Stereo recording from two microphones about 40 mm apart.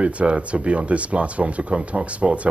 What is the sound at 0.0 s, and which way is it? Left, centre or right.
Speech, right.